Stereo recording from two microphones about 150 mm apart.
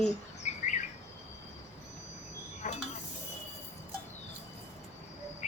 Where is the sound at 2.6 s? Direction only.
50° left (ahead or behind).